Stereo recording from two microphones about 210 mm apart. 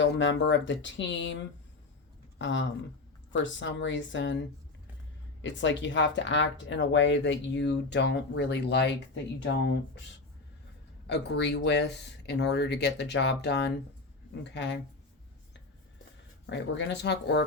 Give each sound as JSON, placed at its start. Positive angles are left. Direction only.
{"t": 0.0, "sound": "speech", "side_deg": 60}
{"t": 2.4, "sound": "speech", "side_deg": 60}
{"t": 11.0, "sound": "speech", "side_deg": 55}
{"t": 16.5, "sound": "speech", "side_deg": 60}